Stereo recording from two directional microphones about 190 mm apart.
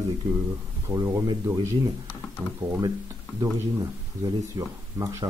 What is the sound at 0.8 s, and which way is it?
Speech, 15° right (ahead or behind).